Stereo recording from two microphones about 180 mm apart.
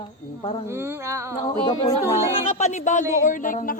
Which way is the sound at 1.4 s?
30° left (ahead or behind).